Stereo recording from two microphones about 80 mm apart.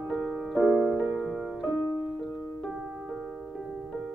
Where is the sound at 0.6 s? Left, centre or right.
Right.